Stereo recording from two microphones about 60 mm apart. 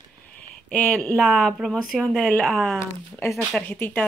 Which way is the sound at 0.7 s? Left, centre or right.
Left.